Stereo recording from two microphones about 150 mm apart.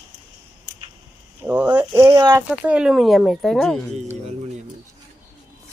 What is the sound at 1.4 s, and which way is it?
Speech, 10° right (ahead or behind).